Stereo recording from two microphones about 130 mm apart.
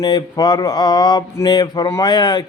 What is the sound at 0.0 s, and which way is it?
Mantra, 30° left (ahead or behind).